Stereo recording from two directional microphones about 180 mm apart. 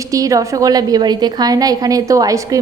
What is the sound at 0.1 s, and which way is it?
A woman's voice, 20° right (ahead or behind).